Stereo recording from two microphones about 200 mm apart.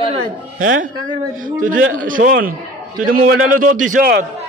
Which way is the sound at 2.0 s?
40° right (ahead or behind).